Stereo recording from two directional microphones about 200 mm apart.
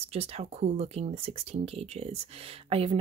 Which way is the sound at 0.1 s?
30° right (ahead or behind).